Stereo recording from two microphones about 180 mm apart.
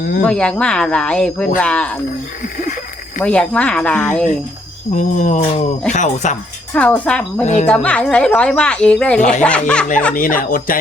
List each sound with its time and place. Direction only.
0.3 s speech: 5° left (ahead or behind)
2.4 s speech: 45° left (ahead or behind)
3.2 s speech: 5° left (ahead or behind)
4.9 s speech: 45° left (ahead or behind)
6.7 s speech: 10° left (ahead or behind)
7.4 s speech: 40° left (ahead or behind)
7.7 s speech: 5° left (ahead or behind)
10.2 s speech: 50° left (ahead or behind)